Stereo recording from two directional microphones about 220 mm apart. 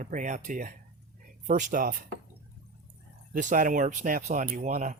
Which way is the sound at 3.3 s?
40° right (ahead or behind).